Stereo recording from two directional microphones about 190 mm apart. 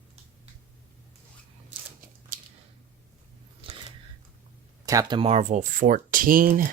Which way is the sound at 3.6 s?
30° right (ahead or behind).